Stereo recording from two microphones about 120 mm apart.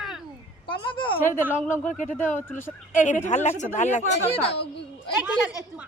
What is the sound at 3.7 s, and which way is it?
Speech, 85° left.